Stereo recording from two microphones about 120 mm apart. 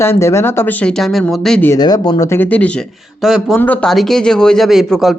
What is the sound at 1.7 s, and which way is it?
Speech, 35° left (ahead or behind).